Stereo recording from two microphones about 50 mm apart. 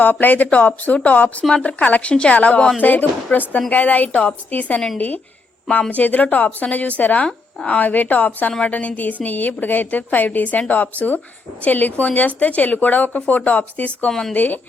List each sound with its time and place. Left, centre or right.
0.0 s a woman's voice: left
4.1 s a woman's voice: left
4.9 s a woman's voice: left
7.3 s speech: centre
7.8 s a woman's voice: left
14.1 s speech: centre
14.3 s a woman's voice: left